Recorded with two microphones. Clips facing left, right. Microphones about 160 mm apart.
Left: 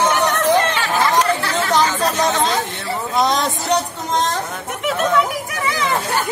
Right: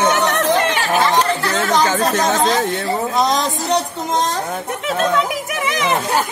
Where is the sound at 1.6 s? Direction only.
45° right (ahead or behind).